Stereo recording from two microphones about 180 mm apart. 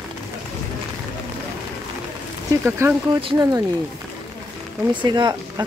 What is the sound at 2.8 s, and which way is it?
Speech, 15° right (ahead or behind).